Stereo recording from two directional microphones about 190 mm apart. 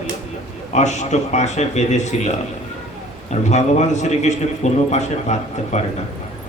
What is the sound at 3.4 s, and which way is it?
A man's voice, 35° left (ahead or behind).